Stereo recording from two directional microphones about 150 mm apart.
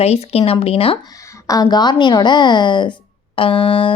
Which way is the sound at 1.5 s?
25° left (ahead or behind).